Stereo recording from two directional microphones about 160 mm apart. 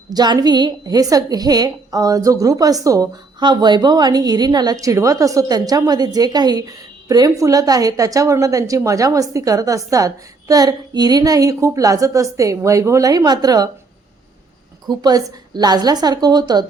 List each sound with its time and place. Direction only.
0.1 s a woman's voice: 25° right (ahead or behind)
14.8 s a woman's voice: 25° right (ahead or behind)